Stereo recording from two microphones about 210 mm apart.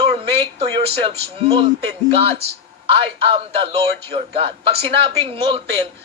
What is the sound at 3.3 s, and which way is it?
A woman's voice, 25° right (ahead or behind).